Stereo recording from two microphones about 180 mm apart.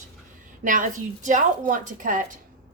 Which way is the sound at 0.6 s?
45° right (ahead or behind).